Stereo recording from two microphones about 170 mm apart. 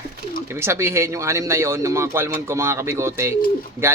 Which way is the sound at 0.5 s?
15° right (ahead or behind).